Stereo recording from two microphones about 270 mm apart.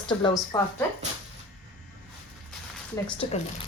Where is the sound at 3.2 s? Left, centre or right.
Left.